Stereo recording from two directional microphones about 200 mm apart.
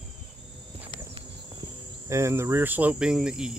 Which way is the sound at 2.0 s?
15° right (ahead or behind).